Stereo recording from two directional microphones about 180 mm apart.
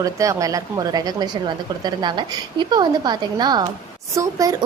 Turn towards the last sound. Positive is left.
turn(degrees=-20)  # may be behind; listen again after turning